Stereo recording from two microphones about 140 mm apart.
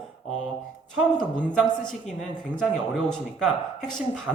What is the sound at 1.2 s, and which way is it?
A woman's voice, 5° left (ahead or behind).